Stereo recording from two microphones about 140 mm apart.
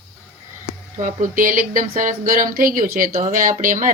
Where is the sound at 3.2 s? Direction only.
70° right (ahead or behind).